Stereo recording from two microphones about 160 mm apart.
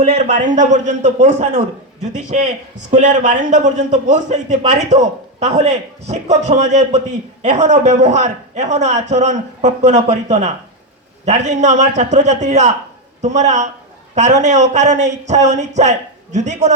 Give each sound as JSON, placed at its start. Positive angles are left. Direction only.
{"t": 0.0, "sound": "a man's voice", "side_deg": -45}